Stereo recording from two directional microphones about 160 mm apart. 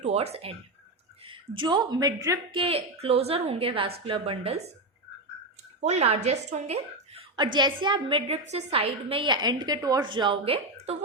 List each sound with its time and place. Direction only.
0.0 s a woman's voice: 40° right (ahead or behind); by 2.4 s 20° right (ahead or behind)
2.5 s a woman's voice: 35° right (ahead or behind)
5.8 s a woman's voice: 45° right (ahead or behind)
7.3 s a woman's voice: 30° right (ahead or behind)